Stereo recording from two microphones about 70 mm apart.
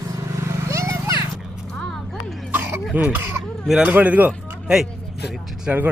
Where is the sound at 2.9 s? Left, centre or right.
Right.